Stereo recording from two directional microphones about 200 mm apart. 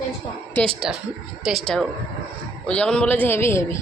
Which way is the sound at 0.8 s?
5° right (ahead or behind).